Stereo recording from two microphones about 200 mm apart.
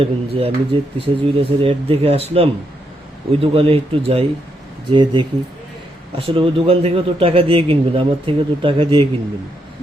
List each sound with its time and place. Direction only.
0.0 s a man's voice: 30° right (ahead or behind)